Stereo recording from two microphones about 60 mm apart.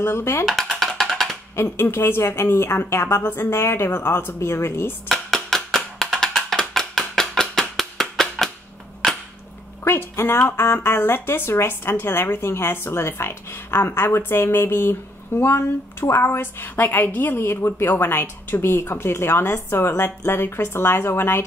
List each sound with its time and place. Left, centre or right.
0.0 s a woman's voice: left
0.5 s a sound: centre
1.5 s a woman's voice: left
5.0 s music: centre
9.8 s a woman's voice: left